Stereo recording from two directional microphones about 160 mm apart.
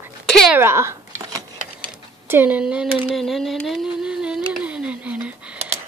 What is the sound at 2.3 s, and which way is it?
Speech, 10° right (ahead or behind).